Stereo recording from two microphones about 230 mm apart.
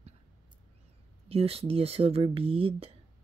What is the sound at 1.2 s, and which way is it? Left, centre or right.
Speech, right.